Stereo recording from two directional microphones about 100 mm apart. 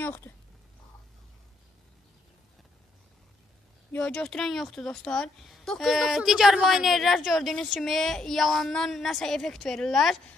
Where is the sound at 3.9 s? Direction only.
10° left (ahead or behind).